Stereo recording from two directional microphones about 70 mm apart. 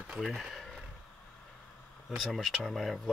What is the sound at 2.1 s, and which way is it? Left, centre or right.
Speech, centre.